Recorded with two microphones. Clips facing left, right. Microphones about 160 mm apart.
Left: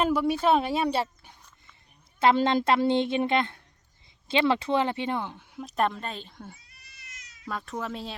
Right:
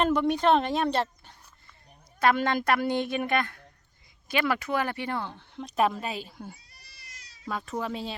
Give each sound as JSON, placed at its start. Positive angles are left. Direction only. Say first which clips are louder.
{"t": 0.0, "sound": "a woman's voice", "louder": "even", "side_deg": 5}
{"t": 2.1, "sound": "a woman's voice", "louder": "left 2 dB", "side_deg": 25}
{"t": 5.5, "sound": "a woman's voice", "louder": "right 2 dB", "side_deg": 0}
{"t": 6.7, "sound": "cat", "louder": "even", "side_deg": -35}
{"t": 7.4, "sound": "a woman's voice", "louder": "right 1 dB", "side_deg": 0}